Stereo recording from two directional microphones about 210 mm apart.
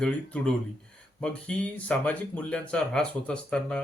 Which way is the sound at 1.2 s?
5° left (ahead or behind).